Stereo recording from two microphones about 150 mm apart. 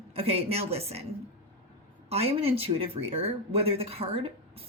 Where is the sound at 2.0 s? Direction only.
40° right (ahead or behind).